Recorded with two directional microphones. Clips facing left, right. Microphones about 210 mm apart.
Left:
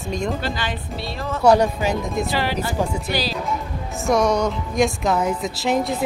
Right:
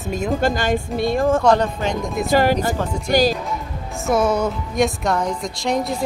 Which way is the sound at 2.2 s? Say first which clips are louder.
Right 7 dB; 45° right (ahead or behind).